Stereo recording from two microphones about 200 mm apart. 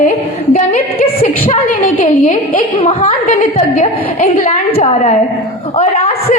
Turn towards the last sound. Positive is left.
turn(degrees=30)  # may be behind; listen again after turning